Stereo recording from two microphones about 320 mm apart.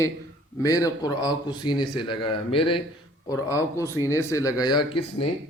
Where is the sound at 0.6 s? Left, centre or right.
Centre.